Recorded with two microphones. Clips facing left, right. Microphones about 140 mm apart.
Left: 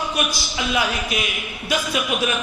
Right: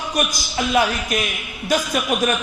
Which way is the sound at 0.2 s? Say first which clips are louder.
Right 2 dB; 45° right (ahead or behind).